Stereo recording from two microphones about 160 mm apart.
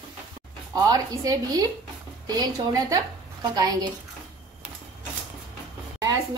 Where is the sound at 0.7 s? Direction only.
20° right (ahead or behind).